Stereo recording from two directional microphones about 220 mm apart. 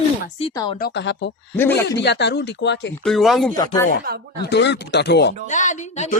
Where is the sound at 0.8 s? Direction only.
50° left (ahead or behind).